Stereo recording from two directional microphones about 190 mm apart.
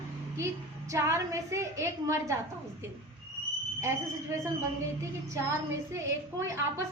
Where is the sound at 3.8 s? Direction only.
15° right (ahead or behind).